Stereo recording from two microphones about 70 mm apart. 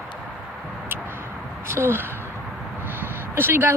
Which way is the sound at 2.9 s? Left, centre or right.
Right.